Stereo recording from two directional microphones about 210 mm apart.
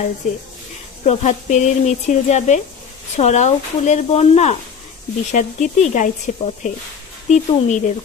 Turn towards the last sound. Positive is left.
turn(degrees=35)  # may be behind; listen again after turning